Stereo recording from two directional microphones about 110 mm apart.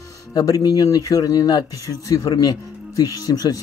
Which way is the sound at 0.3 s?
35° left (ahead or behind).